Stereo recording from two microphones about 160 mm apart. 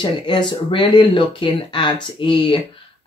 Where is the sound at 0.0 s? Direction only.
30° left (ahead or behind).